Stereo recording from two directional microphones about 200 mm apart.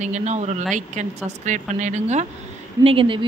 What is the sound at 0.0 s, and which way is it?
A woman's voice, 35° right (ahead or behind).